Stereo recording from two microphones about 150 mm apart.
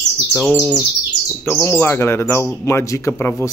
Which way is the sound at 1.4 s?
15° left (ahead or behind).